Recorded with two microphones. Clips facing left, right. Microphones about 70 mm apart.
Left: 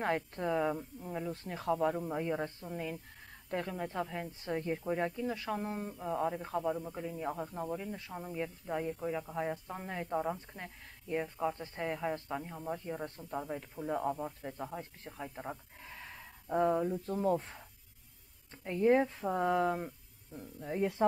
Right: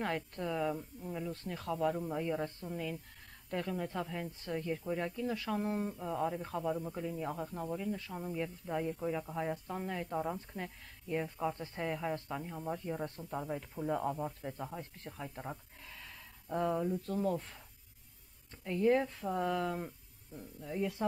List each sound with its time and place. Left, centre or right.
0.0 s speech: left
4.6 s speech: left; by 15.6 s centre
15.8 s a sound: left
18.6 s speech: left
20.6 s speech: left